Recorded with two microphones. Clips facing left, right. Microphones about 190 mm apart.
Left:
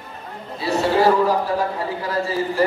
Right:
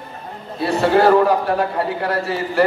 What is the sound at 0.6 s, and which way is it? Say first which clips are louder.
A man's voice: right 3 dB; 60° right (ahead or behind).